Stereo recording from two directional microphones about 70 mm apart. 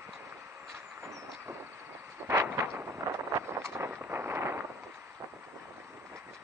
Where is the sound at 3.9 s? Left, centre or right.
Right.